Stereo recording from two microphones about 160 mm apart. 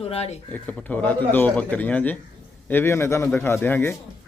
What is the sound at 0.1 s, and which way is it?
Speech, 40° left (ahead or behind).